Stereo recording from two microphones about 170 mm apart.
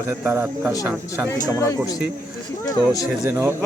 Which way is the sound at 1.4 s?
20° left (ahead or behind).